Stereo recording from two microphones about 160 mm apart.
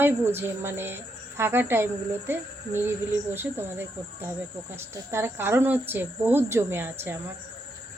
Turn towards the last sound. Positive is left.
turn(degrees=-15)  # may be behind; listen again after turning